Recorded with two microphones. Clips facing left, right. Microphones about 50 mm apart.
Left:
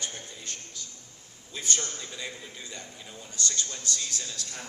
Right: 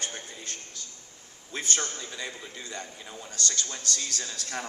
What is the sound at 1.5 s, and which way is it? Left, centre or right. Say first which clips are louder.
Speech: right 2 dB; right.